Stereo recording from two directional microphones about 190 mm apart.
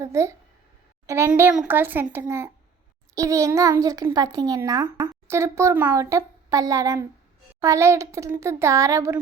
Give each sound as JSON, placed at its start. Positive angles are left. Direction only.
{"t": 0.0, "sound": "a child's voice", "side_deg": -15}